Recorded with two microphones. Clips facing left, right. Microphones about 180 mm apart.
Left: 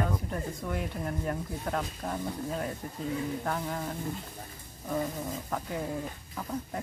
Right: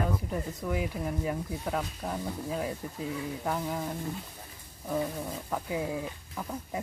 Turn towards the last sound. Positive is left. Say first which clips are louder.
# even
turn(degrees=-5)  # may be behind; listen again after turning